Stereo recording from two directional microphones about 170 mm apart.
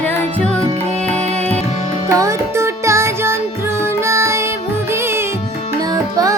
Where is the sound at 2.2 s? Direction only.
15° right (ahead or behind).